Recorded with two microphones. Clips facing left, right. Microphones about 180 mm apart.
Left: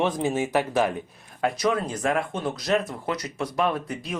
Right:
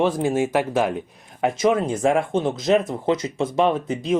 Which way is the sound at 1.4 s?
25° right (ahead or behind).